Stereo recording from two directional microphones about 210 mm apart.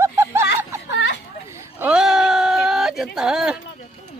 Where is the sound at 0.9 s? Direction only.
60° left (ahead or behind).